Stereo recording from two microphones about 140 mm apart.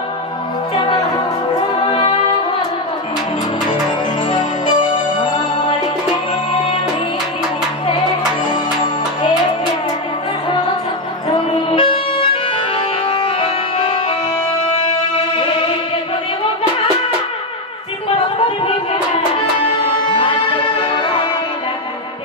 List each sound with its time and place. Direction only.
1.9 s brass instrument: 40° left (ahead or behind)
4.3 s music: 35° left (ahead or behind)
11.3 s music: 40° left (ahead or behind)
15.3 s music: 40° left (ahead or behind)
20.2 s music: 35° left (ahead or behind)